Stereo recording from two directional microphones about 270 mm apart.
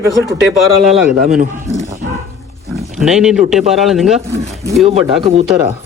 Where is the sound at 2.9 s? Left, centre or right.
Centre.